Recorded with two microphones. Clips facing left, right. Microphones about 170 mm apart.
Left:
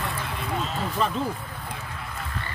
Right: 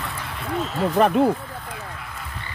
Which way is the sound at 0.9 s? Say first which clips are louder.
Right 11 dB; 60° right (ahead or behind).